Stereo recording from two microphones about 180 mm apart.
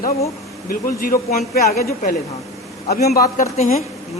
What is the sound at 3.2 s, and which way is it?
Speech, 50° left (ahead or behind).